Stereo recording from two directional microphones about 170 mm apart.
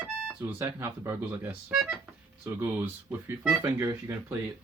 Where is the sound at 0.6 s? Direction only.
15° right (ahead or behind).